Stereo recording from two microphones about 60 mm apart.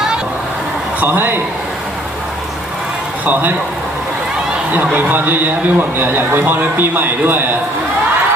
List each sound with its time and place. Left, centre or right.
1.0 s a man's voice: right
4.9 s a man's voice: right